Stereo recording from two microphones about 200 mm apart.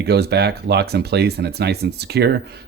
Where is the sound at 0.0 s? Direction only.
55° right (ahead or behind).